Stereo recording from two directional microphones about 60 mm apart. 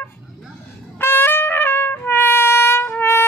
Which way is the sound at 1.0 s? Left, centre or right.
Left.